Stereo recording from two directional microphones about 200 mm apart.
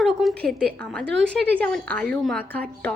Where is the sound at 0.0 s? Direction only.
Centre (ahead or behind).